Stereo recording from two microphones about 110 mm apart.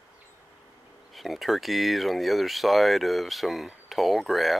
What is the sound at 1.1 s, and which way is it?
Speech, centre (ahead or behind).